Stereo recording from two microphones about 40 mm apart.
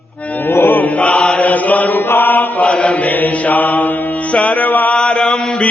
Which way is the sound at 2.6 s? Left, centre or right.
Left.